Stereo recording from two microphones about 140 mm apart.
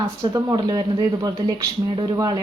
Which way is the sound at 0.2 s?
25° right (ahead or behind).